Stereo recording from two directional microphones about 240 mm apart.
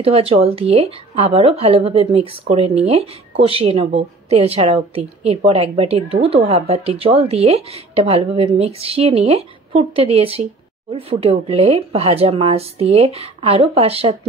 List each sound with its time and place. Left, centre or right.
0.0 s a woman's voice: right